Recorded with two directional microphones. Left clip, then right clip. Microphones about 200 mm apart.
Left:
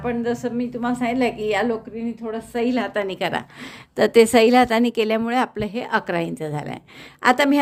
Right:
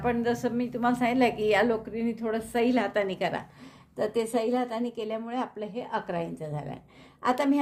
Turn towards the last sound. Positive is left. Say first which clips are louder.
# left 9 dB
turn(degrees=40)  # may be behind; listen again after turning